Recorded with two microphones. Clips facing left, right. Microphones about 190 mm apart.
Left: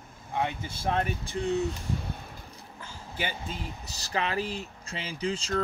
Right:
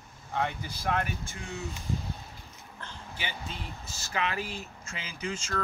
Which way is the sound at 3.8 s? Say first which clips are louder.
Left 1 dB; 35° left (ahead or behind).